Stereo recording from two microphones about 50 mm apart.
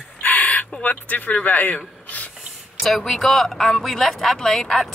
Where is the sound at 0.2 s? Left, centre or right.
Left.